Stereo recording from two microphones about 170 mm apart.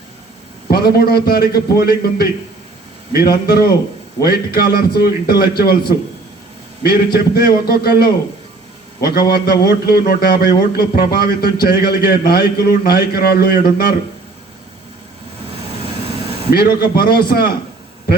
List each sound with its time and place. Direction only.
0.7 s a man's voice: 65° left (ahead or behind)
6.8 s a man's voice: 70° left (ahead or behind)
16.5 s a man's voice: 65° left (ahead or behind)